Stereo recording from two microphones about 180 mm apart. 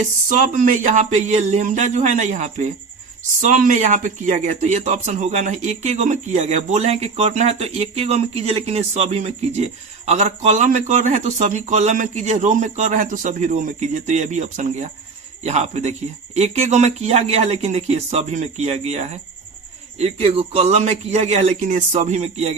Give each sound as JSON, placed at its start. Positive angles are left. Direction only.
{"t": 0.0, "sound": "a man's voice", "side_deg": -45}